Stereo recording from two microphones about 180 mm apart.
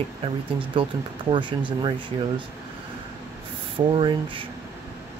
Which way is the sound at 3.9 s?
30° right (ahead or behind).